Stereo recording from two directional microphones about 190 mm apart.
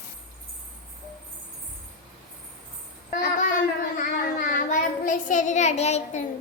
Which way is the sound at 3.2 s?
45° left (ahead or behind).